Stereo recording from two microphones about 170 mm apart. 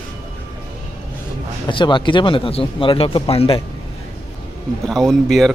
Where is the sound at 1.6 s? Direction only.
30° left (ahead or behind).